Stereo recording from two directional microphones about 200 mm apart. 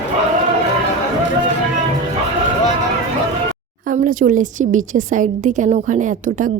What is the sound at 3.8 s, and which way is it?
A woman's voice, 40° right (ahead or behind).